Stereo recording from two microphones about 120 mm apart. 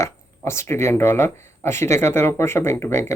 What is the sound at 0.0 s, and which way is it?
Speech, 20° left (ahead or behind).